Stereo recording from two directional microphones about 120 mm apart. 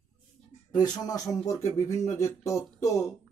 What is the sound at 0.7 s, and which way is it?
Speech, 30° left (ahead or behind).